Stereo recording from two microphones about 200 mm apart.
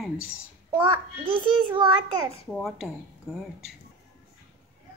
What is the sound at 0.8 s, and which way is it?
A child's voice, 25° right (ahead or behind).